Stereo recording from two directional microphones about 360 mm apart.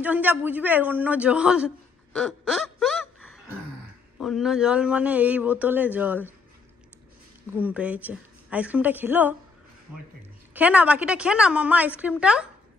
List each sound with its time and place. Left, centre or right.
0.0 s a man's voice: centre
2.1 s a sound: centre
4.2 s a man's voice: centre
7.5 s a man's voice: centre
10.5 s a man's voice: centre